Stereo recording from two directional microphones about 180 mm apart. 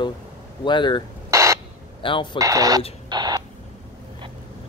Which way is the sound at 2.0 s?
30° left (ahead or behind).